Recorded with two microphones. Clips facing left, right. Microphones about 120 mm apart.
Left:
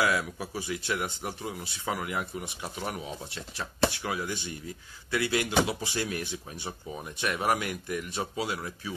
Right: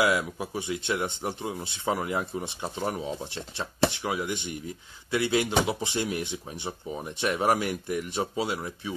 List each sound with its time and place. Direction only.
0.0 s speech: 20° right (ahead or behind)